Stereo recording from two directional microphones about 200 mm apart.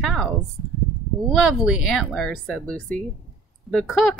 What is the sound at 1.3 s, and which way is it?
Speech, centre (ahead or behind).